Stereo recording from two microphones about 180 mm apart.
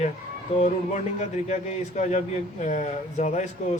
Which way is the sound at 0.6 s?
40° left (ahead or behind).